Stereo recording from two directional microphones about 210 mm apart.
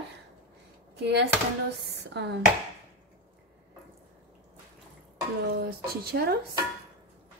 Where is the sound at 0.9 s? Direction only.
55° right (ahead or behind).